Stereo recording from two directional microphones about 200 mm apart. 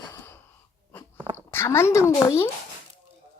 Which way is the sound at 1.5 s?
15° left (ahead or behind).